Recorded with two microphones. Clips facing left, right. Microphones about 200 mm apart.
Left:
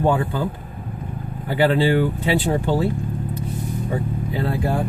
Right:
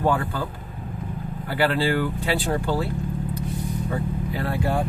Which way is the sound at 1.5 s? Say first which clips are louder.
Left 5 dB; 20° left (ahead or behind).